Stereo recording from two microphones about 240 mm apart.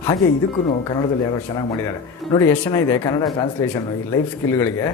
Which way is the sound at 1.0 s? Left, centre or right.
Centre.